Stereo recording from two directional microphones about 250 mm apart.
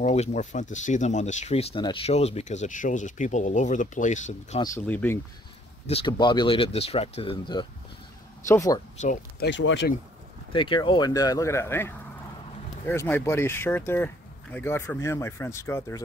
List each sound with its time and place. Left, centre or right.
0.0 s speech: left
4.6 s speech: centre
5.9 s speech: left
9.0 s speech: left
9.5 s speech: left
10.5 s speech: centre